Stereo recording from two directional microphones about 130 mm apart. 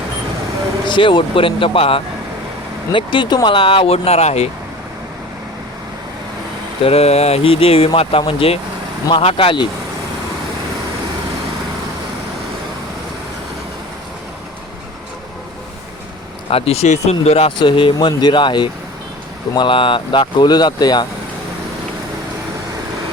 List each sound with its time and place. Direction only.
0.9 s speech: 40° left (ahead or behind); by 4.4 s 55° left (ahead or behind)
6.8 s speech: 50° left (ahead or behind)
16.5 s speech: 50° left (ahead or behind); by 21.1 s 35° left (ahead or behind)